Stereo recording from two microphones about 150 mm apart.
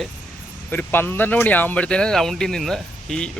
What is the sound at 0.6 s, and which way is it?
Speech, 15° left (ahead or behind).